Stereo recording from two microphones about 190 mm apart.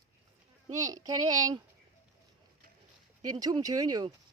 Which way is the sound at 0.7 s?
20° right (ahead or behind).